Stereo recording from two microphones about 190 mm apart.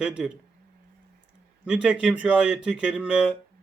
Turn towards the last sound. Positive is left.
turn(degrees=-5)  # may be behind; listen again after turning